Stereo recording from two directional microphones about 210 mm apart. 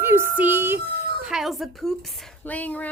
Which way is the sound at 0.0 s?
10° right (ahead or behind).